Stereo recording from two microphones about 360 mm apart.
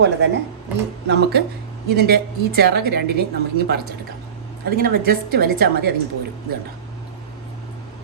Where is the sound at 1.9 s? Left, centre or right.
Right.